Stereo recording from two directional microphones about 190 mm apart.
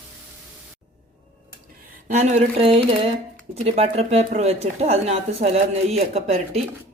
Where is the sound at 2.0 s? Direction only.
40° right (ahead or behind).